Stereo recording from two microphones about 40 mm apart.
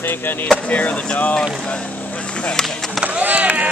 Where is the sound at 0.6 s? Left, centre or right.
Left.